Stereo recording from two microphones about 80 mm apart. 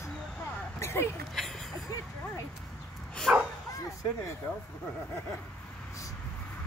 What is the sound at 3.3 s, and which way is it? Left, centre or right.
Bow-wow, centre.